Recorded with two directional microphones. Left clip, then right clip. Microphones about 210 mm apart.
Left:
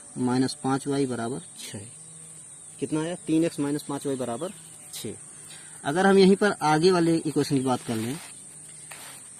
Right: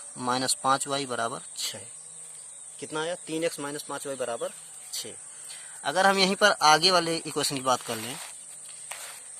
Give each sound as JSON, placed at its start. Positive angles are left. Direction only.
{"t": 0.2, "sound": "a man's voice", "side_deg": -35}
{"t": 2.8, "sound": "speech", "side_deg": -35}
{"t": 5.8, "sound": "a man's voice", "side_deg": -20}